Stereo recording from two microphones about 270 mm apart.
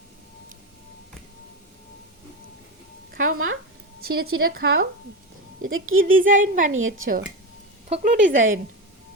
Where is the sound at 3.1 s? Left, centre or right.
Right.